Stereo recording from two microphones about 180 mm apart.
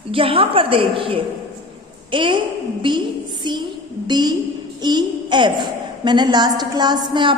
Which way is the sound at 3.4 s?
25° right (ahead or behind).